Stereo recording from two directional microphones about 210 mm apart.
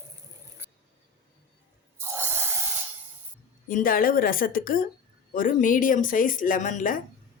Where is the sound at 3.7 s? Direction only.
40° left (ahead or behind).